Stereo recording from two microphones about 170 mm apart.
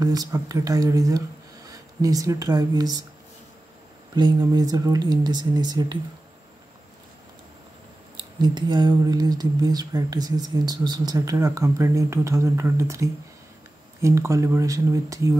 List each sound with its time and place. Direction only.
0.0 s speech: 20° right (ahead or behind)
4.1 s speech: 25° right (ahead or behind)
8.2 s speech: 25° right (ahead or behind)